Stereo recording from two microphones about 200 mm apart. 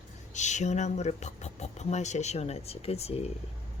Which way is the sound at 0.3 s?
35° left (ahead or behind).